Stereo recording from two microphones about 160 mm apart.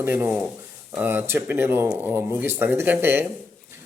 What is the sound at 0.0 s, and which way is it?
Speech, 15° right (ahead or behind).